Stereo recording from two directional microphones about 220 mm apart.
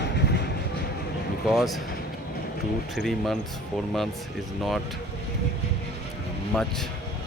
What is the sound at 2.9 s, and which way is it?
Speech, centre (ahead or behind).